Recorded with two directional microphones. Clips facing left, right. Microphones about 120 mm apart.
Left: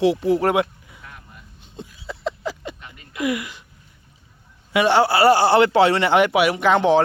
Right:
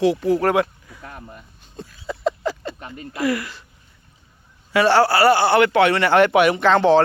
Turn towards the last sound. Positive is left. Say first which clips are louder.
# right 2 dB
turn(degrees=15)  # may be behind; listen again after turning